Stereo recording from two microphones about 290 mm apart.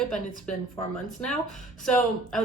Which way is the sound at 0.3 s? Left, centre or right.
Left.